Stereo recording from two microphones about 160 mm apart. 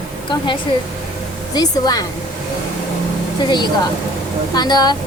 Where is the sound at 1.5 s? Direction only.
25° left (ahead or behind).